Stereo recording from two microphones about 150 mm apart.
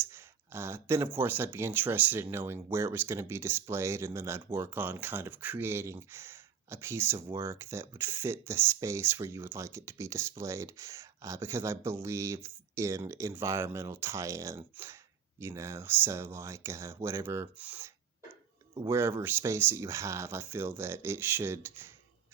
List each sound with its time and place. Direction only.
0.0 s speech: 15° right (ahead or behind)